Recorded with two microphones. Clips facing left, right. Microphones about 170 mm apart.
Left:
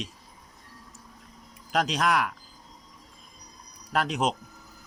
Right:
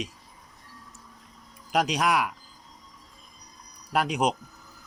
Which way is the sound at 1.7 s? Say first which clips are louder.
Right 1 dB; 10° right (ahead or behind).